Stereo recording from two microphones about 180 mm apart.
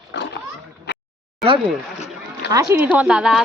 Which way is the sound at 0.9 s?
70° left (ahead or behind).